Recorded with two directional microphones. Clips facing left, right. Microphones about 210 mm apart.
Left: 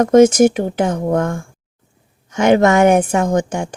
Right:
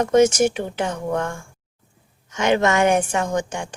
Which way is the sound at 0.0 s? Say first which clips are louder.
Left 6 dB; 45° left (ahead or behind).